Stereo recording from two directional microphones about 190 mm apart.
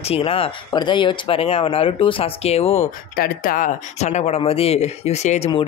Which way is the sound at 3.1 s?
50° left (ahead or behind).